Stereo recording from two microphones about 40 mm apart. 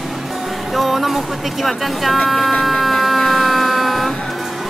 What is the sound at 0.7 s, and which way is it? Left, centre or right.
Speech, centre.